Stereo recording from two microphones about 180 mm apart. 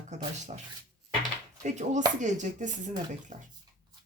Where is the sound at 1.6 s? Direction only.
40° right (ahead or behind).